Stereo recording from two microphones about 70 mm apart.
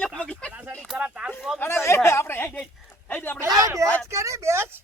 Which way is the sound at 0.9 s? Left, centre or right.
Centre.